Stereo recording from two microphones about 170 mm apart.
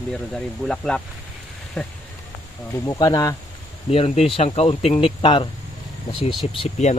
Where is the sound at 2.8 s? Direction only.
20° left (ahead or behind).